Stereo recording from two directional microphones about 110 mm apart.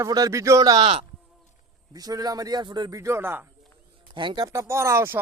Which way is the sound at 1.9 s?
35° right (ahead or behind).